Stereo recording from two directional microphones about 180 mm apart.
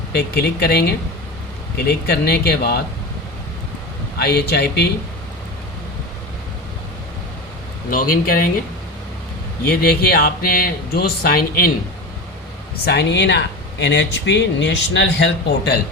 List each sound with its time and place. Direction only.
0.1 s speech: 65° left (ahead or behind)
4.2 s speech: 60° left (ahead or behind)
7.9 s speech: 50° left (ahead or behind)
9.6 s speech: 60° left (ahead or behind)
12.8 s speech: 65° left (ahead or behind)